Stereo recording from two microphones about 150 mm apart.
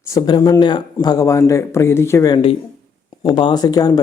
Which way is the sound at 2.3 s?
35° left (ahead or behind).